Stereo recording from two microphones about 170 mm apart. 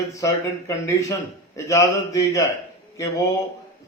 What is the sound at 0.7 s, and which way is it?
Speech, 15° left (ahead or behind).